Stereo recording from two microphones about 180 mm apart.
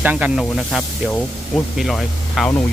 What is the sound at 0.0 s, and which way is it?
Speech, 10° right (ahead or behind).